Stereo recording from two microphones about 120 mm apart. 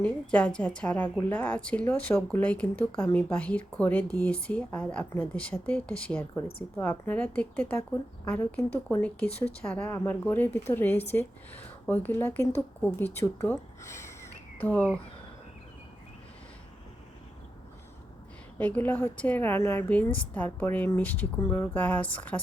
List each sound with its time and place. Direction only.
0.0 s speech: 10° left (ahead or behind)
18.6 s speech: 15° left (ahead or behind)